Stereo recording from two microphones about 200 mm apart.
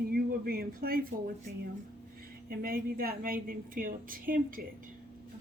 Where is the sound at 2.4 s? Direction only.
45° right (ahead or behind).